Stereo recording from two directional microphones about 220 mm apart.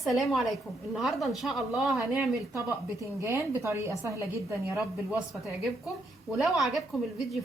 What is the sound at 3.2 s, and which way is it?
Speech, 10° right (ahead or behind).